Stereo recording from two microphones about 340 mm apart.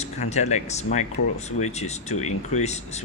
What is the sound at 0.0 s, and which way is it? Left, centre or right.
Speech, centre.